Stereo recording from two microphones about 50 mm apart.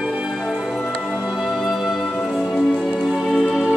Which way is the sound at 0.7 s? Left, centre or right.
Centre.